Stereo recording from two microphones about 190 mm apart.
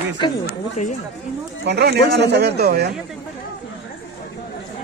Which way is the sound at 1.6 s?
60° right (ahead or behind).